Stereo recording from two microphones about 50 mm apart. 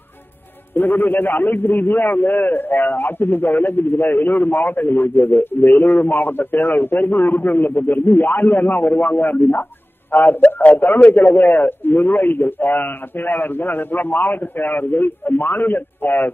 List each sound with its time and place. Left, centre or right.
0.7 s a man's voice: left
10.4 s a man's voice: left